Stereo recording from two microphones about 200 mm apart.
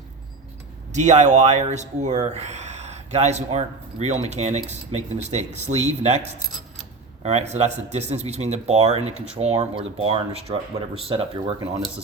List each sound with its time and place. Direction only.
0.9 s speech: 35° right (ahead or behind)